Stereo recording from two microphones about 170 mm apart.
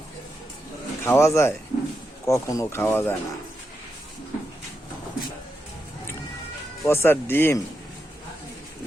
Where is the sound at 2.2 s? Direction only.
20° left (ahead or behind).